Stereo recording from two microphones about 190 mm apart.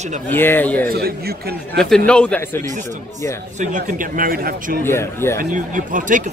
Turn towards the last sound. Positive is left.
turn(degrees=-45)  # may be behind; listen again after turning